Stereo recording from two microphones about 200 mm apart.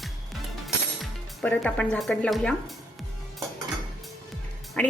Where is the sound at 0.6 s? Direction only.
5° left (ahead or behind).